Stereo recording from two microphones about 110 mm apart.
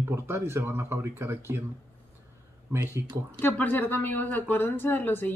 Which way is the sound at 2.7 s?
25° right (ahead or behind).